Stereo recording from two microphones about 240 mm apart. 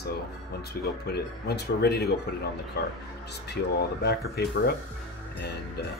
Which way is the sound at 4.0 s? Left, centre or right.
Left.